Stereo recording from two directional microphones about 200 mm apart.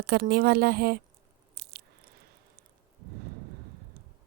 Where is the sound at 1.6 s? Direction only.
55° right (ahead or behind).